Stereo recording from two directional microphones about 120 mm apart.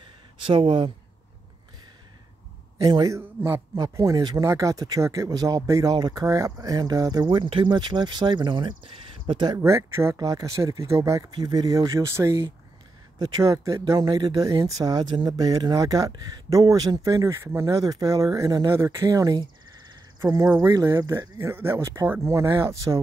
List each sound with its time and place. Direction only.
0.0 s a sound: 45° right (ahead or behind)
2.8 s speech: 30° right (ahead or behind)
3.2 s speech: 20° right (ahead or behind); by 9.6 s 35° right (ahead or behind)
9.6 s speech: 20° right (ahead or behind)
10.1 s speech: 30° right (ahead or behind)